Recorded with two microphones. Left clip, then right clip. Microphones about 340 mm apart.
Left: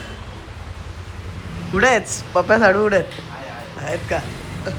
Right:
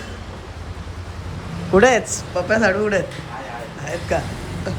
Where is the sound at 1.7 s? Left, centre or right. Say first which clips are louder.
Right 2 dB; centre.